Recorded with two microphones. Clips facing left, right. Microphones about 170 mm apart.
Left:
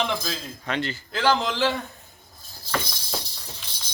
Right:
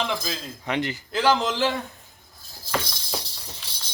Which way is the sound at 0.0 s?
Centre (ahead or behind).